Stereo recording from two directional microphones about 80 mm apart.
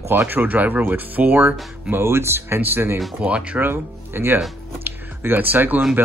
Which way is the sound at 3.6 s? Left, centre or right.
Right.